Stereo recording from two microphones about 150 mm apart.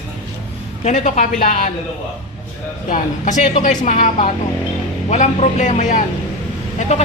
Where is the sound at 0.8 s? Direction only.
55° left (ahead or behind).